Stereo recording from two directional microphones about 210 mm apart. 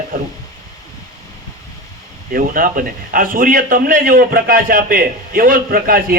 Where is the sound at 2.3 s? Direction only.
40° right (ahead or behind).